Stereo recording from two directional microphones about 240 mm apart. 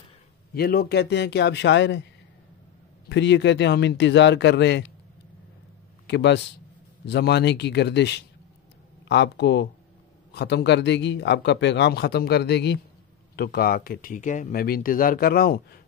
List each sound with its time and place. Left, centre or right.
0.6 s speech: left
3.1 s speech: left
6.0 s speech: left